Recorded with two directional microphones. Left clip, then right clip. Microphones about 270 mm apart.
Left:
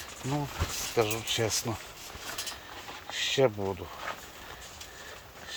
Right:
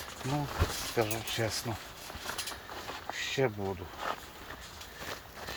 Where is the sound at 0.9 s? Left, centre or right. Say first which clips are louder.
Left 6 dB; left.